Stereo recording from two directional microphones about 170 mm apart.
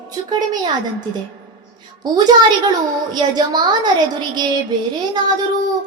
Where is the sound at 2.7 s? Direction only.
25° right (ahead or behind).